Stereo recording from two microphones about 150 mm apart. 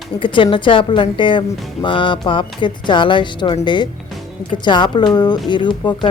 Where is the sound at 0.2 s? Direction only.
35° left (ahead or behind).